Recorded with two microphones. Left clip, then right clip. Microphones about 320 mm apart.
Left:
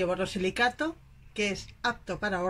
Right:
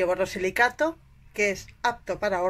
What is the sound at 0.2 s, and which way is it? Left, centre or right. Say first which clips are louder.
Speech: right 4 dB; right.